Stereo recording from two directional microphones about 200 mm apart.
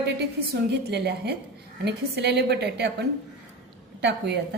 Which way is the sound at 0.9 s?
55° right (ahead or behind).